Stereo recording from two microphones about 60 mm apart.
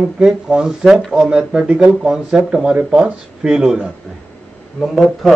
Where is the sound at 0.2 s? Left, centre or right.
Centre.